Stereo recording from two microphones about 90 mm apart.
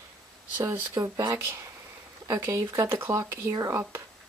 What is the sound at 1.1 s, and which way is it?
Speech, 40° right (ahead or behind).